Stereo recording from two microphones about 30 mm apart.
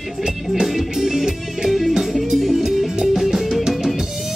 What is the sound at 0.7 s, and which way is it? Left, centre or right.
Music, centre.